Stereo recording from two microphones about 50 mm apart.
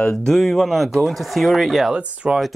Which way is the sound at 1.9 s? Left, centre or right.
Centre.